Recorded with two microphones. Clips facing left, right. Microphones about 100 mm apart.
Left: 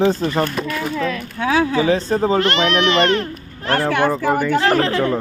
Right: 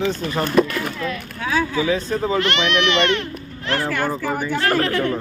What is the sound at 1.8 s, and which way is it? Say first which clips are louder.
Speech: left 4 dB; 40° left (ahead or behind).